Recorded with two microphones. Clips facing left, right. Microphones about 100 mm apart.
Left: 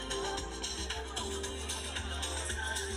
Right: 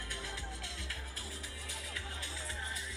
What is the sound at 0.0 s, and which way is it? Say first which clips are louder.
Music: left 8 dB; 25° left (ahead or behind).